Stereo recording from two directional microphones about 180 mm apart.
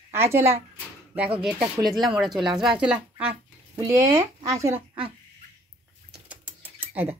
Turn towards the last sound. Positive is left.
turn(degrees=-10)  # may be behind; listen again after turning